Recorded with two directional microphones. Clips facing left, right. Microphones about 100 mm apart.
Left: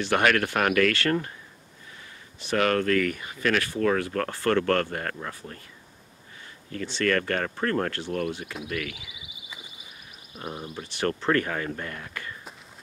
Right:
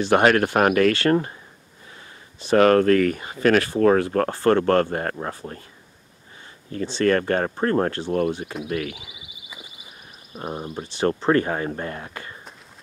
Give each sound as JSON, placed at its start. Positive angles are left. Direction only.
{"t": 0.0, "sound": "speech", "side_deg": -30}
{"t": 2.4, "sound": "speech", "side_deg": -35}
{"t": 6.7, "sound": "speech", "side_deg": -30}
{"t": 10.3, "sound": "speech", "side_deg": -30}